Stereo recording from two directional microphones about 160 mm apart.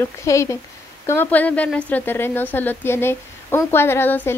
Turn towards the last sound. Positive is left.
turn(degrees=10)  # may be behind; listen again after turning